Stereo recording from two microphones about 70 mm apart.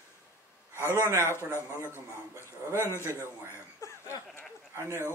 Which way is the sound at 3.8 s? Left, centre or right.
Left.